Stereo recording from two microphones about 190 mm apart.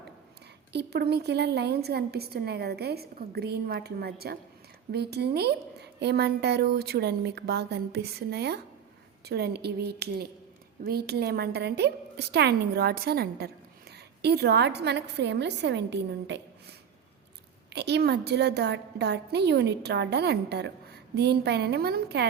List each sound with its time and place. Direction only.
0.7 s a woman's voice: 60° right (ahead or behind)
17.7 s a woman's voice: 60° right (ahead or behind)